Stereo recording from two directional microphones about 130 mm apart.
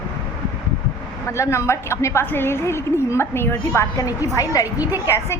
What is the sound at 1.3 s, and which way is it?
A woman's voice, 20° left (ahead or behind).